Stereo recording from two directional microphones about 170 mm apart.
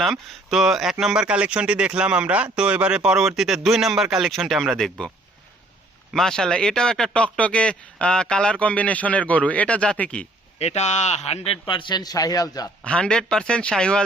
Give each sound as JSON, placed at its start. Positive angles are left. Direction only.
{"t": 0.0, "sound": "speech", "side_deg": 0}
{"t": 6.1, "sound": "speech", "side_deg": 5}
{"t": 10.6, "sound": "a man's voice", "side_deg": 40}
{"t": 12.8, "sound": "speech", "side_deg": 5}